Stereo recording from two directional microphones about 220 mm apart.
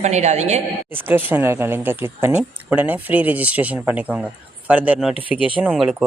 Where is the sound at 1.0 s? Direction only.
10° right (ahead or behind).